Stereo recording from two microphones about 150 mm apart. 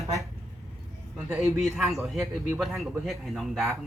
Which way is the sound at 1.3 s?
10° right (ahead or behind).